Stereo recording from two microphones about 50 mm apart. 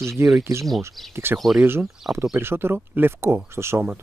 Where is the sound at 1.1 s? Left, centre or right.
Right.